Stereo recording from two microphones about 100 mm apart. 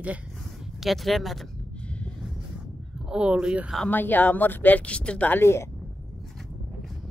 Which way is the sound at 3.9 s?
20° left (ahead or behind).